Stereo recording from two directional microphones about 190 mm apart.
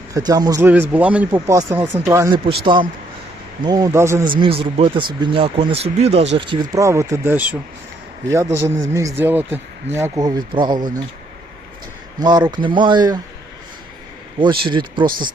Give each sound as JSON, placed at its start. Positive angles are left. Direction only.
{"t": 0.1, "sound": "speech", "side_deg": -20}
{"t": 0.7, "sound": "speech", "side_deg": -10}
{"t": 3.6, "sound": "speech", "side_deg": -20}
{"t": 4.4, "sound": "speech", "side_deg": -25}
{"t": 12.2, "sound": "speech", "side_deg": -20}
{"t": 14.6, "sound": "speech", "side_deg": -25}